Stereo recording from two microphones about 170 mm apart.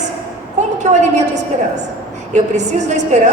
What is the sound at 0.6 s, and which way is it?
A woman's voice, 45° right (ahead or behind).